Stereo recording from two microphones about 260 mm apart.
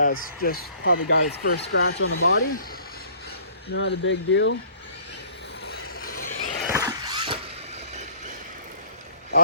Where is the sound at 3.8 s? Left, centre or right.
Left.